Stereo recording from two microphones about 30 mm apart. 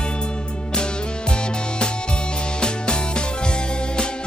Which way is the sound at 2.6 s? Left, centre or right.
Left.